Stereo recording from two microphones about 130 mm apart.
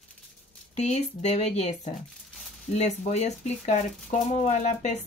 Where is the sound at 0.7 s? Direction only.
60° left (ahead or behind).